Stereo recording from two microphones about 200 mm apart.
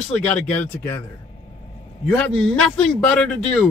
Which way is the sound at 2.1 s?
5° left (ahead or behind).